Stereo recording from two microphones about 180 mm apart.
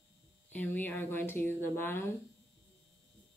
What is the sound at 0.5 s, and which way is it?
Speech, 10° left (ahead or behind).